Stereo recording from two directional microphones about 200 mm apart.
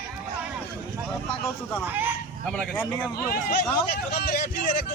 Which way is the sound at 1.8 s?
10° right (ahead or behind).